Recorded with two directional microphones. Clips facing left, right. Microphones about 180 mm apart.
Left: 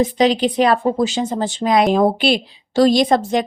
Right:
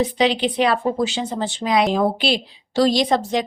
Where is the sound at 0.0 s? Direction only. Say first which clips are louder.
Left 3 dB; 45° left (ahead or behind).